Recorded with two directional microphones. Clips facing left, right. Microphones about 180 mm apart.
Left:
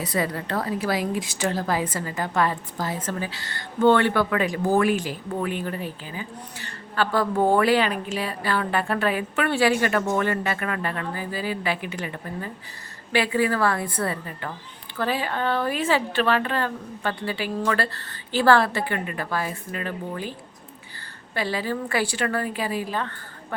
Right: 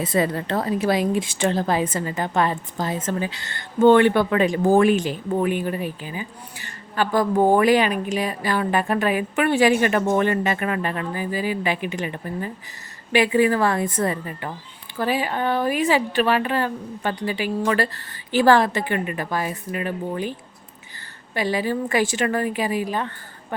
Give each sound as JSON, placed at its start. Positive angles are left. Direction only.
{"t": 0.0, "sound": "a woman's voice", "side_deg": -25}
{"t": 21.3, "sound": "a woman's voice", "side_deg": -15}